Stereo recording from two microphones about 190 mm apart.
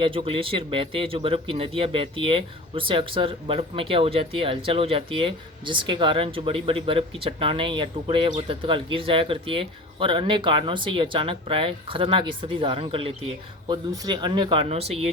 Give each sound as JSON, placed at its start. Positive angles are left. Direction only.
{"t": 0.0, "sound": "a man's voice", "side_deg": -25}